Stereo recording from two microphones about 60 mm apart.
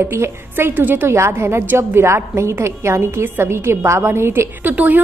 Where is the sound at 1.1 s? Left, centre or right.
Right.